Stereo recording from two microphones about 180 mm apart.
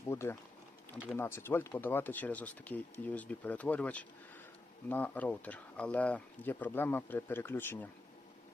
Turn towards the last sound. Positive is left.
turn(degrees=10)  # may be behind; listen again after turning